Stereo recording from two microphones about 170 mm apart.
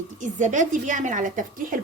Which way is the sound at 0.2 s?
45° right (ahead or behind).